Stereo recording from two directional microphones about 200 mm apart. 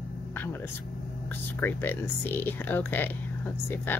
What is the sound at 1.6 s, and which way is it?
Speech, 10° left (ahead or behind).